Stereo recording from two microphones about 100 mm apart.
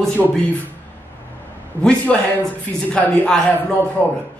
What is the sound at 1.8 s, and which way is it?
Speech, 5° left (ahead or behind).